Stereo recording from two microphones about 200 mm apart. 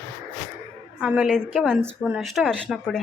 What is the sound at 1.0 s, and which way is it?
Speech, 5° right (ahead or behind).